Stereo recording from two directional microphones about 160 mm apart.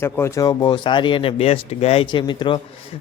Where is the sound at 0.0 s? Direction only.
15° left (ahead or behind).